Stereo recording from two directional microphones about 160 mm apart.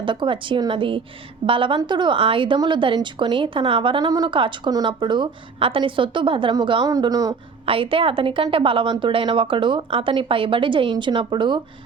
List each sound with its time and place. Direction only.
0.0 s a woman's voice: 30° right (ahead or behind)
7.6 s a woman's voice: 35° right (ahead or behind)